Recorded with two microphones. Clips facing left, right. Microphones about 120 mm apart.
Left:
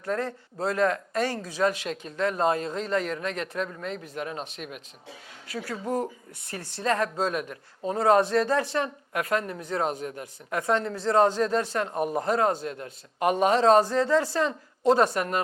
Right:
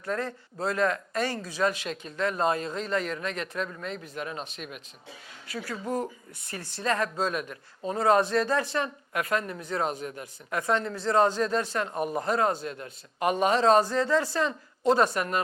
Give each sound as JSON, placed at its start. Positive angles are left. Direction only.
{"t": 0.0, "sound": "a man's voice", "side_deg": 45}
{"t": 6.8, "sound": "a man's voice", "side_deg": 55}